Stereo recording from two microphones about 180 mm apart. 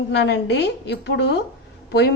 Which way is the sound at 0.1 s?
70° left (ahead or behind).